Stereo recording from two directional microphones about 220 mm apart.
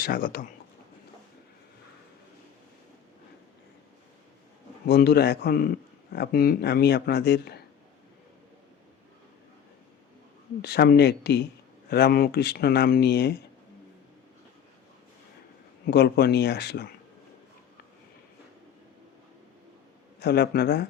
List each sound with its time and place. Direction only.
0.0 s speech: 40° left (ahead or behind)
4.9 s a man's voice: 45° left (ahead or behind)
10.6 s a man's voice: 50° left (ahead or behind)
15.9 s a man's voice: 45° left (ahead or behind)
20.1 s a man's voice: 50° left (ahead or behind)